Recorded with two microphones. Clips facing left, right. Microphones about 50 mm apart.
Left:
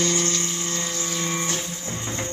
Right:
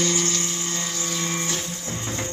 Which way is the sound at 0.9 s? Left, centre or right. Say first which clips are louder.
Even; centre.